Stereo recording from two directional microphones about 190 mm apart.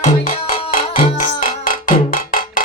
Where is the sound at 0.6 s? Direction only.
30° left (ahead or behind).